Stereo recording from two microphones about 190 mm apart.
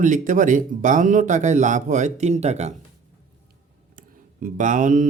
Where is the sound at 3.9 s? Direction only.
45° right (ahead or behind).